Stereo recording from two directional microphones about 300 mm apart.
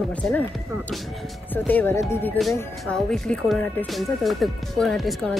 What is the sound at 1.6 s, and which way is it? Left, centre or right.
Speech, centre.